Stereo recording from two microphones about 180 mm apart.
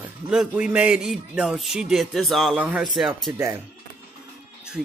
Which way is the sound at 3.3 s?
15° right (ahead or behind).